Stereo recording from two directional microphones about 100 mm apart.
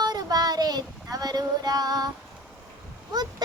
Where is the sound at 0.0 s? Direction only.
40° right (ahead or behind).